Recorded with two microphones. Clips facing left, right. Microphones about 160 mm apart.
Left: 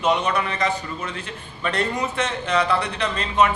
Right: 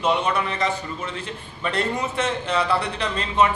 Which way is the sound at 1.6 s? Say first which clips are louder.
Left 1 dB; 30° right (ahead or behind).